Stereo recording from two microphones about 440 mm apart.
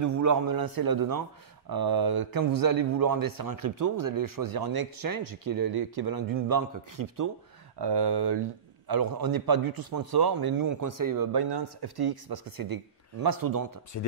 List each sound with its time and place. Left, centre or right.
0.0 s a man's voice: right
7.8 s a man's voice: right